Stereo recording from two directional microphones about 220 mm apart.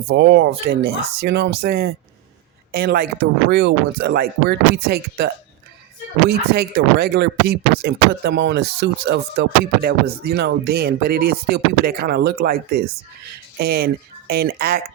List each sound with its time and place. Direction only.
0.1 s speech: 50° right (ahead or behind)